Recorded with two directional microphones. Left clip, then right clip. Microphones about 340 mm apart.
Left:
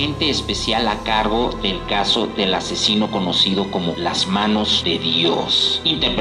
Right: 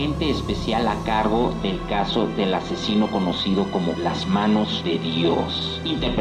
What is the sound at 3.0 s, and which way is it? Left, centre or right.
Speech, right.